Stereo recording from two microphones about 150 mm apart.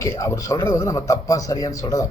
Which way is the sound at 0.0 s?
20° left (ahead or behind).